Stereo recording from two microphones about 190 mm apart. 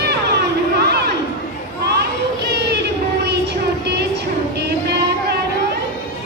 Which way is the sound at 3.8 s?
60° right (ahead or behind).